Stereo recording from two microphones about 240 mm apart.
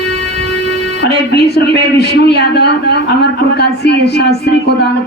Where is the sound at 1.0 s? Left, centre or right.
Left.